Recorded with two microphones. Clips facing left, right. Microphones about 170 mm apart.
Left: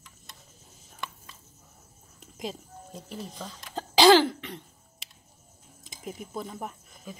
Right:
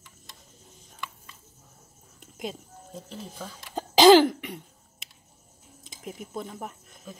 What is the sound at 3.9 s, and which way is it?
Cough, 15° right (ahead or behind).